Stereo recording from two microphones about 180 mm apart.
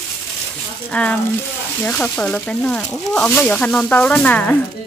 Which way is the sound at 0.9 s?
5° left (ahead or behind).